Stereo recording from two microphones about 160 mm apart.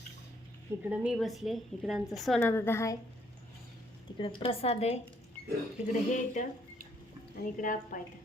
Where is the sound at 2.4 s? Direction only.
15° left (ahead or behind).